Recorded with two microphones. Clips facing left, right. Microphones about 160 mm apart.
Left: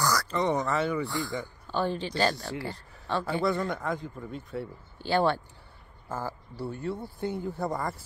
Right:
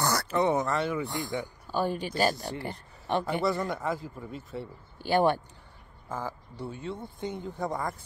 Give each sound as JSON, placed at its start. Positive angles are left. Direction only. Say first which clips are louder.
{"t": 0.0, "sound": "a sound", "louder": "left 1 dB", "side_deg": -25}
{"t": 0.3, "sound": "speech", "louder": "right 1 dB", "side_deg": -10}
{"t": 1.0, "sound": "speech", "louder": "even", "side_deg": -20}
{"t": 3.4, "sound": "speech", "louder": "even", "side_deg": 0}
{"t": 5.0, "sound": "speech", "louder": "right 1 dB", "side_deg": -15}
{"t": 6.0, "sound": "speech", "louder": "left 1 dB", "side_deg": 5}